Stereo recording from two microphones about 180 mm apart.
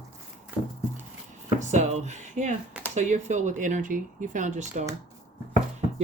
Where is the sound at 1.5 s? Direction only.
40° right (ahead or behind).